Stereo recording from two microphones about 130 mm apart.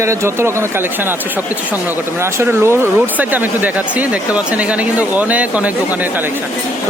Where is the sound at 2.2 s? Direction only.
20° right (ahead or behind).